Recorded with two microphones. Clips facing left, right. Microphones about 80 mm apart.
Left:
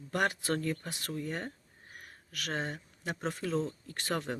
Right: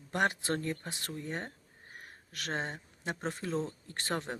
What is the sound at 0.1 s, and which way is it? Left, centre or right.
Speech, right.